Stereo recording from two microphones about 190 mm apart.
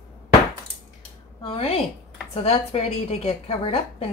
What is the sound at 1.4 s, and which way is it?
A woman's voice, 30° left (ahead or behind).